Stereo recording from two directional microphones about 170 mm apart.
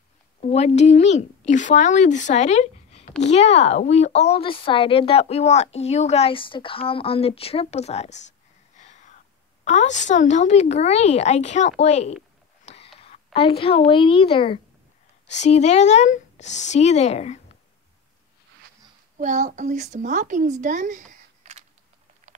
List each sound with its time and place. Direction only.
0.4 s a woman's voice: 40° left (ahead or behind)
8.7 s a sound: 45° left (ahead or behind)
9.7 s a woman's voice: 45° left (ahead or behind)
12.6 s a sound: 35° left (ahead or behind)
13.0 s a woman's voice: 35° left (ahead or behind)
19.1 s a woman's voice: 45° right (ahead or behind)